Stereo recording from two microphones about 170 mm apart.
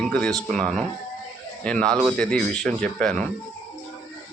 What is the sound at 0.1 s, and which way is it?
A man's voice, 5° left (ahead or behind).